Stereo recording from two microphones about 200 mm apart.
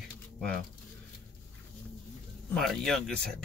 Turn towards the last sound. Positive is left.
turn(degrees=5)  # may be behind; listen again after turning